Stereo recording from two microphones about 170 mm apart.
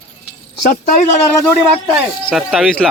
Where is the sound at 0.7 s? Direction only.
50° left (ahead or behind).